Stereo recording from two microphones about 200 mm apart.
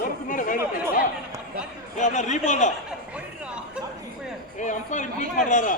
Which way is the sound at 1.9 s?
35° left (ahead or behind).